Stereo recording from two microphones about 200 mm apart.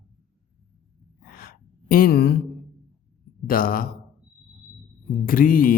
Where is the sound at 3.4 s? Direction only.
45° left (ahead or behind).